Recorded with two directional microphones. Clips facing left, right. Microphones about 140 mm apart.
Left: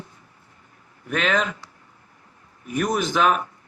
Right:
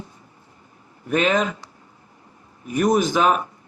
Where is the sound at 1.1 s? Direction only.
25° right (ahead or behind).